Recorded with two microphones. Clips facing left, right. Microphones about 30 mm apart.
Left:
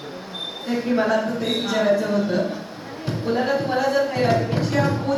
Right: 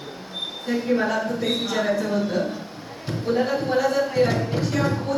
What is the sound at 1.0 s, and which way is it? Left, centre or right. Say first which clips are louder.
Speech: left 2 dB; centre.